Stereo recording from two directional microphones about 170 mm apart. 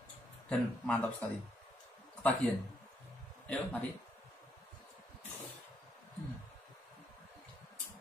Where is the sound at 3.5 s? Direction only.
10° left (ahead or behind).